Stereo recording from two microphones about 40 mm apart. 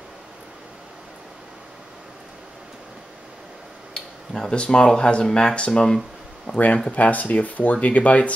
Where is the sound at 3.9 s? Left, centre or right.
Left.